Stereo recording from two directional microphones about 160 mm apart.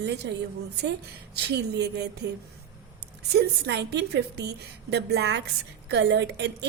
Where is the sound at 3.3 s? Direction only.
90° right.